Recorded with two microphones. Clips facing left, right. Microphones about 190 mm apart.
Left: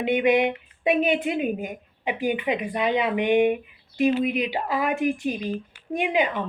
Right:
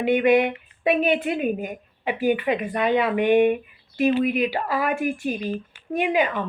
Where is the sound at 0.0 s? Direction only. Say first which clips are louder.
Right 2 dB; 20° left (ahead or behind).